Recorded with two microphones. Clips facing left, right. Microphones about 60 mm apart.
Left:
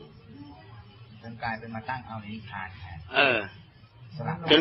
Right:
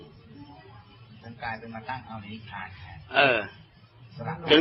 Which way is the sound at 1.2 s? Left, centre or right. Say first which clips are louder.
Left 2 dB; left.